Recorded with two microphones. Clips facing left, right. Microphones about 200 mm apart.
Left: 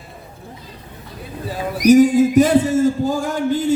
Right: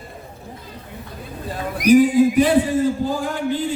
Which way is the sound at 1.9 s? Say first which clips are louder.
Left 2 dB; 45° left (ahead or behind).